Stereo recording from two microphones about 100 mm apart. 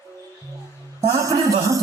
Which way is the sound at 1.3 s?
35° right (ahead or behind).